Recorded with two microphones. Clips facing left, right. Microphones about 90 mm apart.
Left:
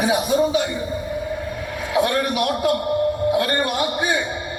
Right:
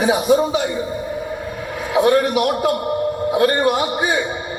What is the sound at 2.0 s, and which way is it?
A man's voice, 25° right (ahead or behind).